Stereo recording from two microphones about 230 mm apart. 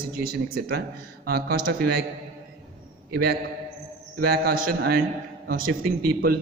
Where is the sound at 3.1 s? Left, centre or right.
Right.